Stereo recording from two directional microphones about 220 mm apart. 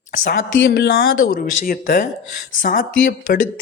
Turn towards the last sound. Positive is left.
turn(degrees=35)  # may be behind; listen again after turning